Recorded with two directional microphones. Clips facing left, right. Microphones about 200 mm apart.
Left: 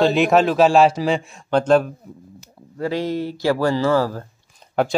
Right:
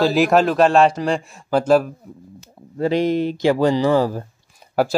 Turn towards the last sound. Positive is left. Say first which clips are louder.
# right 1 dB
turn(degrees=-5)  # may be behind; listen again after turning